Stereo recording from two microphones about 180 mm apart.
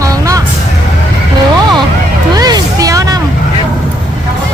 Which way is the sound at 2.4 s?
20° right (ahead or behind).